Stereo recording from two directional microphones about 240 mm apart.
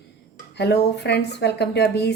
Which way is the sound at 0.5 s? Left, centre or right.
Left.